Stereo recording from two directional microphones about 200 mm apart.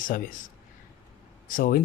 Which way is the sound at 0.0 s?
45° left (ahead or behind).